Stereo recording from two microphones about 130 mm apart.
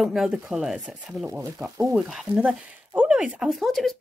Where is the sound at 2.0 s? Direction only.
Centre (ahead or behind).